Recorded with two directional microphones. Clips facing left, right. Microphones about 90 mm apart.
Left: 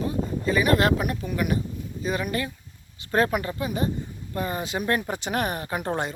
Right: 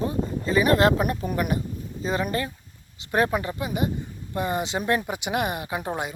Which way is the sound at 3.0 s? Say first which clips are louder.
Even; 15° right (ahead or behind).